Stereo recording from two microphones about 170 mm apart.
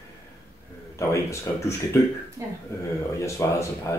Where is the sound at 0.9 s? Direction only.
15° left (ahead or behind).